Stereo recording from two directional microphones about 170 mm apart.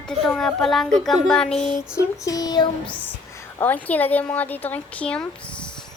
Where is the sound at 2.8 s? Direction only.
10° left (ahead or behind).